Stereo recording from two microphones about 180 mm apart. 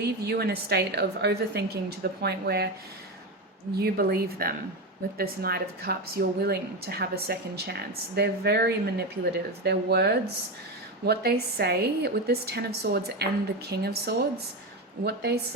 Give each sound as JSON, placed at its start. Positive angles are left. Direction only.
{"t": 0.0, "sound": "a woman's voice", "side_deg": -60}
{"t": 3.8, "sound": "a woman's voice", "side_deg": -60}